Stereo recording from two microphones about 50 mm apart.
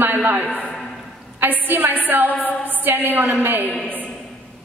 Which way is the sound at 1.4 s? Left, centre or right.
Right.